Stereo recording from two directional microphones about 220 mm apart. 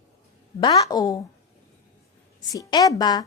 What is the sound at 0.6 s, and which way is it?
Speech, 15° left (ahead or behind).